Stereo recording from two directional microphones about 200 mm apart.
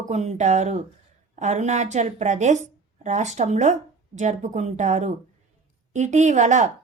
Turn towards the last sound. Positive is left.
turn(degrees=-35)  # may be behind; listen again after turning